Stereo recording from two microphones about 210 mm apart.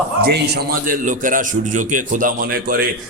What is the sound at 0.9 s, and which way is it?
A man's voice, 40° right (ahead or behind).